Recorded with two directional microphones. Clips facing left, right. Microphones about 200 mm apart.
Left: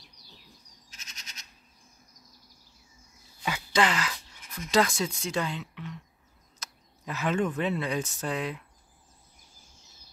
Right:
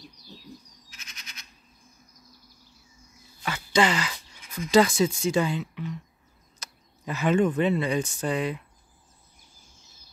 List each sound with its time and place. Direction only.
0.8 s frog: 40° left (ahead or behind)
3.7 s speech: centre (ahead or behind)